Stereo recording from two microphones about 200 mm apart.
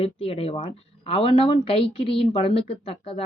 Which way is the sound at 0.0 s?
30° left (ahead or behind).